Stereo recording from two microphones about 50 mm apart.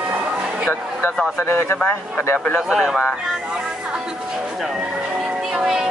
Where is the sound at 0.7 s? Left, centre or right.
Left.